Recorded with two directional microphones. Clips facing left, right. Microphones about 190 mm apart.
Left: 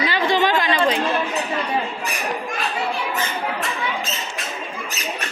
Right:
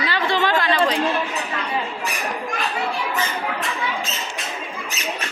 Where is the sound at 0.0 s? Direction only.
20° left (ahead or behind).